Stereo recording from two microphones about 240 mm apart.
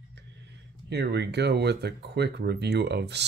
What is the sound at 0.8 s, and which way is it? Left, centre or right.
Speech, right.